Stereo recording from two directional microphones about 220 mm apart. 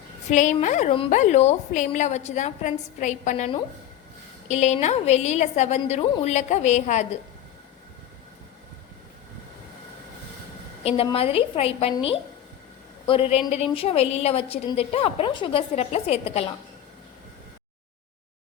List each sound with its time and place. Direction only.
0.3 s a woman's voice: 35° left (ahead or behind)
10.8 s a woman's voice: 25° left (ahead or behind)